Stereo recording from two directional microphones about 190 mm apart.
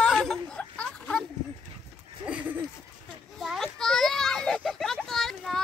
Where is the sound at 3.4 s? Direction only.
Centre (ahead or behind).